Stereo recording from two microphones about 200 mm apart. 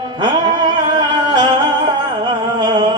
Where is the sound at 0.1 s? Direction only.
25° right (ahead or behind).